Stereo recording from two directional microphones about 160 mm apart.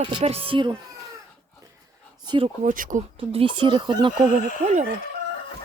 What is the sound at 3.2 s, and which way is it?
Speech, 35° right (ahead or behind).